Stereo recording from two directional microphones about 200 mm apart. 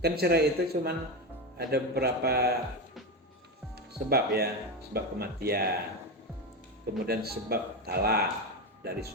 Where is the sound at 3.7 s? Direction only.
50° right (ahead or behind).